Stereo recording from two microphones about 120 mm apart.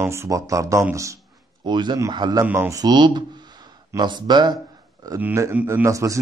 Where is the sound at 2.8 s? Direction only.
35° right (ahead or behind).